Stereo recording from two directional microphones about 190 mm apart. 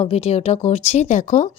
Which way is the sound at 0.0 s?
30° left (ahead or behind).